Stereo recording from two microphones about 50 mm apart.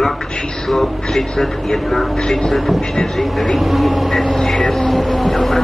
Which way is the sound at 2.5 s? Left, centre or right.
Centre.